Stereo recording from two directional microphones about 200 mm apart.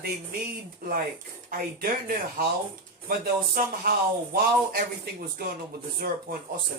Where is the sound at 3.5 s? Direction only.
50° right (ahead or behind).